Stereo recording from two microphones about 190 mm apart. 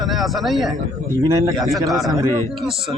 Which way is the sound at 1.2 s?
20° right (ahead or behind).